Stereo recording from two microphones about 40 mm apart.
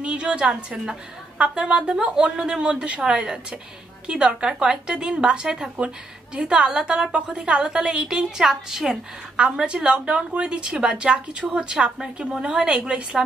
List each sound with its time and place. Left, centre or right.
0.0 s a woman's voice: right
7.1 s a woman's voice: right; by 8.9 s centre
9.4 s a woman's voice: right